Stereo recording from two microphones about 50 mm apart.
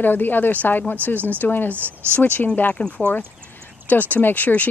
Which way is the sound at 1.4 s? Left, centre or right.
Left.